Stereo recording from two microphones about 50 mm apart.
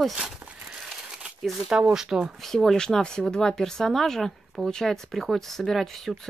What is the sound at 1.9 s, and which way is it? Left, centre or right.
Speech, centre.